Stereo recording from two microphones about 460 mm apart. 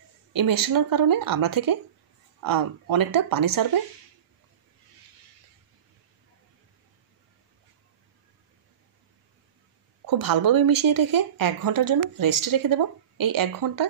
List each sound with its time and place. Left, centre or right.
0.3 s speech: right
10.0 s speech: right